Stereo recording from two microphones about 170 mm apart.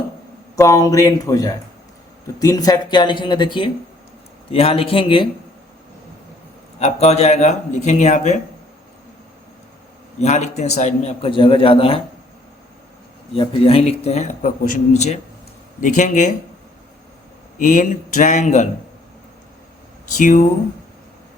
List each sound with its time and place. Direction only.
0.5 s a man's voice: 20° left (ahead or behind)
6.7 s speech: 40° left (ahead or behind)
10.2 s a man's voice: 40° left (ahead or behind)
13.3 s a man's voice: 30° left (ahead or behind); by 16.3 s 45° left (ahead or behind)
17.6 s speech: 50° left (ahead or behind)
20.1 s speech: 50° left (ahead or behind)